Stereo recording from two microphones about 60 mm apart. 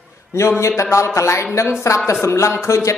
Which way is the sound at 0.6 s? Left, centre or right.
Left.